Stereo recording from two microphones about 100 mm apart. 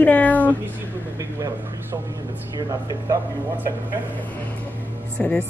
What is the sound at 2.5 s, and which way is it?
Speech, 35° right (ahead or behind).